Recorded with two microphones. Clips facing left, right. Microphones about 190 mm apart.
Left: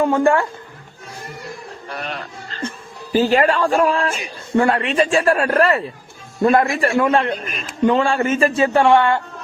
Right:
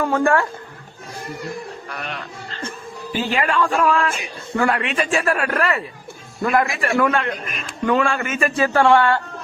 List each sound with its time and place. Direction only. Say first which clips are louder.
0.0 s speech: left 3 dB; 20° left (ahead or behind)
1.9 s a man's voice: left 2 dB; 35° left (ahead or behind); by 9.2 s 20° left (ahead or behind)